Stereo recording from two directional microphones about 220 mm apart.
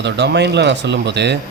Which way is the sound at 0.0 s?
50° right (ahead or behind).